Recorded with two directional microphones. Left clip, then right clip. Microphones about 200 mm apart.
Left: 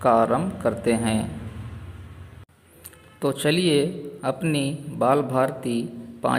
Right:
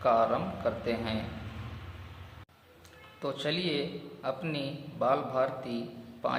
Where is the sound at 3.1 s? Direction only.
40° left (ahead or behind).